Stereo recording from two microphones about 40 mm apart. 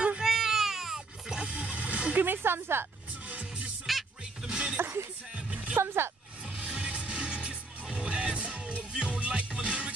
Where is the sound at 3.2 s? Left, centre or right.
Right.